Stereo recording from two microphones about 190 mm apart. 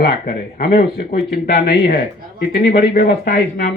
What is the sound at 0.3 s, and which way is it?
Speech, 55° left (ahead or behind).